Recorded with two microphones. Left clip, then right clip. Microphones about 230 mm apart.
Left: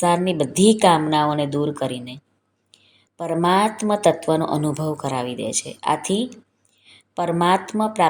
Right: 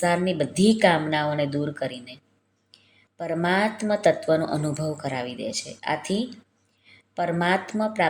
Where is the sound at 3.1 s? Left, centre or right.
Left.